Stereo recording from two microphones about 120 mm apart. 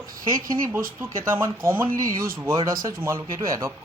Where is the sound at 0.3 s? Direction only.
30° right (ahead or behind).